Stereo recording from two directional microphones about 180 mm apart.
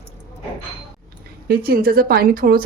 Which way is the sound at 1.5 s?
55° right (ahead or behind).